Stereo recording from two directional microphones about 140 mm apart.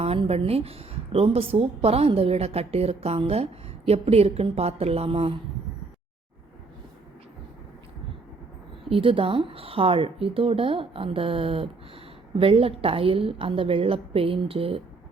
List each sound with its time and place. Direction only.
0.0 s a woman's voice: 45° right (ahead or behind)
8.9 s speech: 40° right (ahead or behind)